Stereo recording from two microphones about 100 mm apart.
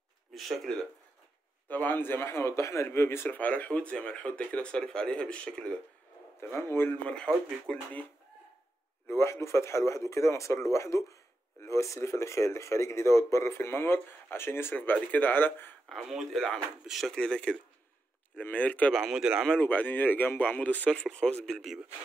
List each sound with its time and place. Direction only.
0.3 s speech: centre (ahead or behind)
1.7 s a man's voice: 20° left (ahead or behind)
6.4 s a man's voice: 25° left (ahead or behind)
9.0 s speech: 25° left (ahead or behind)
15.9 s a man's voice: centre (ahead or behind)
18.9 s speech: 5° right (ahead or behind)
19.6 s a man's voice: 15° left (ahead or behind); by 21.8 s centre (ahead or behind)